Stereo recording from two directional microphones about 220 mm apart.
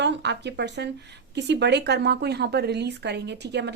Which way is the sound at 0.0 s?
50° right (ahead or behind).